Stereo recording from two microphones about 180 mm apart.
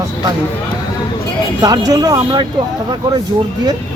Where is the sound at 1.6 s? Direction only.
20° right (ahead or behind).